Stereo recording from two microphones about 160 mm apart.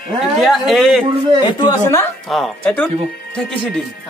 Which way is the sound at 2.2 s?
Centre (ahead or behind).